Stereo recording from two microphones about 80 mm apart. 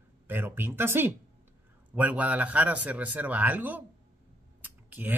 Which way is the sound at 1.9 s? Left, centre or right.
Centre.